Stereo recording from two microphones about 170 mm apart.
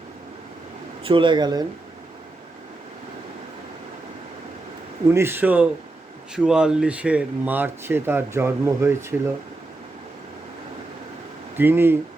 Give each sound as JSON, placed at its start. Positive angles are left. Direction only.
{"t": 1.0, "sound": "speech", "side_deg": -30}
{"t": 5.1, "sound": "speech", "side_deg": -15}
{"t": 11.5, "sound": "speech", "side_deg": -10}